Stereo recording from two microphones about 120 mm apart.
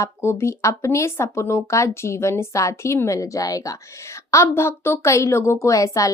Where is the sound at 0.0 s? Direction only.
20° left (ahead or behind).